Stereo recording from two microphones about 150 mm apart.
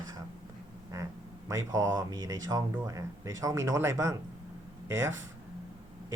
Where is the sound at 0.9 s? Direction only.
20° right (ahead or behind).